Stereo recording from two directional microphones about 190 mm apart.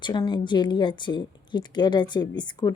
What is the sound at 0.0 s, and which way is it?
Speech, 25° left (ahead or behind).